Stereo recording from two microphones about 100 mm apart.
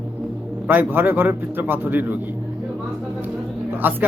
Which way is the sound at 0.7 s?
20° right (ahead or behind).